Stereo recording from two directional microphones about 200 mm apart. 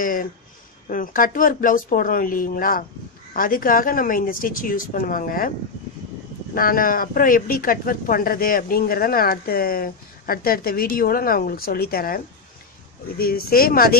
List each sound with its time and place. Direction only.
0.0 s speech: 45° left (ahead or behind)
6.5 s speech: 45° left (ahead or behind)
13.2 s speech: 45° left (ahead or behind)